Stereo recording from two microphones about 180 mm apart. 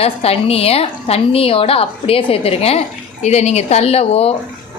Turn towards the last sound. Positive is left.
turn(degrees=35)  # may be behind; listen again after turning